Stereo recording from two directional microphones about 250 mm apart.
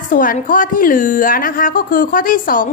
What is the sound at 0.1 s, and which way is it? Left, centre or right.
A woman's voice, left.